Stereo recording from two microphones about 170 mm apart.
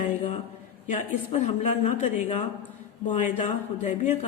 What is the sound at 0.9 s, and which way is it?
A man's voice, 40° left (ahead or behind).